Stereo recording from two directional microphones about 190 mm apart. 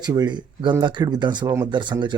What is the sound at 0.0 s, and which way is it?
Speech, 20° right (ahead or behind).